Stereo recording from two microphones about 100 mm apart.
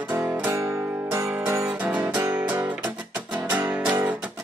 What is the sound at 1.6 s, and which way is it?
Music, 15° right (ahead or behind).